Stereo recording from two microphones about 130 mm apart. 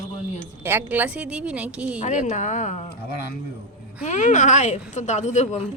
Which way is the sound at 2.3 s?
70° left (ahead or behind).